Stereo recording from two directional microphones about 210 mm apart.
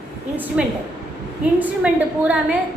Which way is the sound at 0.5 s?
5° right (ahead or behind).